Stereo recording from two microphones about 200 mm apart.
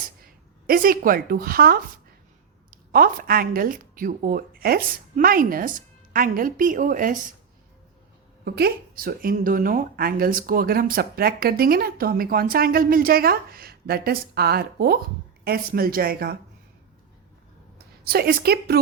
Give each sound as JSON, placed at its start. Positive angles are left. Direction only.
{"t": 0.7, "sound": "speech", "side_deg": -45}
{"t": 8.4, "sound": "speech", "side_deg": -50}
{"t": 18.0, "sound": "speech", "side_deg": -50}